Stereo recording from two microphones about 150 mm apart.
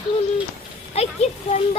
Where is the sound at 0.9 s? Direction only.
45° left (ahead or behind).